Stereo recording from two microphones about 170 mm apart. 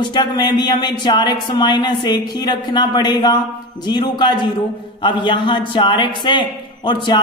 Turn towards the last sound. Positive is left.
turn(degrees=25)  # may be behind; listen again after turning